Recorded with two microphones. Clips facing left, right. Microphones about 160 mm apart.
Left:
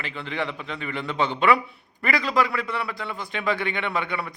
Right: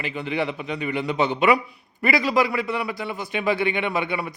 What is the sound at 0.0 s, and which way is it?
A man's voice, 15° right (ahead or behind).